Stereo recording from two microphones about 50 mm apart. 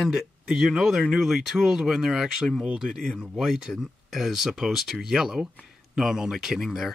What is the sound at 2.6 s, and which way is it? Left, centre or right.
Speech, centre.